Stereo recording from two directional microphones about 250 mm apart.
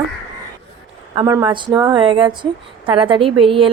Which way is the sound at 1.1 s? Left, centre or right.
Centre.